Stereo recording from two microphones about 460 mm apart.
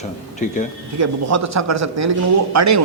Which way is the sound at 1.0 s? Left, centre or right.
Right.